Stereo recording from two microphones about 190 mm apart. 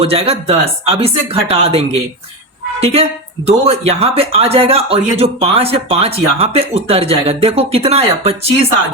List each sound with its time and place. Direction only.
0.0 s speech: 30° right (ahead or behind)